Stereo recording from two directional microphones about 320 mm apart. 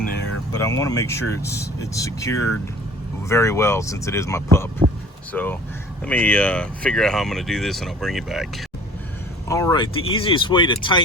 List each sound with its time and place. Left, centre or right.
0.5 s speech: centre
4.8 s speech: centre
5.3 s speech: centre